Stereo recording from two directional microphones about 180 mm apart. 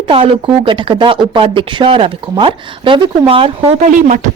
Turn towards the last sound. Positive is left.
turn(degrees=-45)  # may be behind; listen again after turning